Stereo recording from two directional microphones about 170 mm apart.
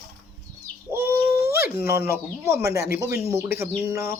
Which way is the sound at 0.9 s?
15° right (ahead or behind).